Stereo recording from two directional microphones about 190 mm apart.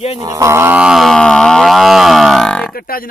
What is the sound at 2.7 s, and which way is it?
Speech, 50° left (ahead or behind).